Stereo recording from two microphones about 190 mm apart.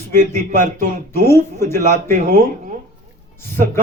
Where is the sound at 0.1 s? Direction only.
45° right (ahead or behind).